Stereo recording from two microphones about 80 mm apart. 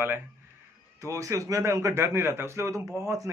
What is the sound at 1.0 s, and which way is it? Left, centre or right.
Speech, right.